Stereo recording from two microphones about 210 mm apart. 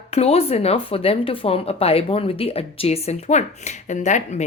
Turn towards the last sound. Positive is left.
turn(degrees=35)  # may be behind; listen again after turning